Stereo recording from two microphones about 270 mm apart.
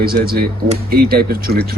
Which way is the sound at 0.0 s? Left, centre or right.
Right.